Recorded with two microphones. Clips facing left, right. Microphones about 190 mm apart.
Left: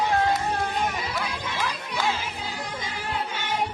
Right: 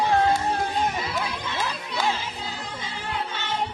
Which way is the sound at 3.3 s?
10° left (ahead or behind).